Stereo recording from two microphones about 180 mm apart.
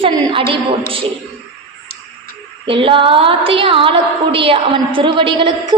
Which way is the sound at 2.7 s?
30° right (ahead or behind).